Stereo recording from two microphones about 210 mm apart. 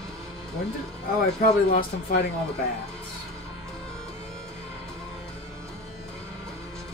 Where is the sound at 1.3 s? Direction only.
40° left (ahead or behind).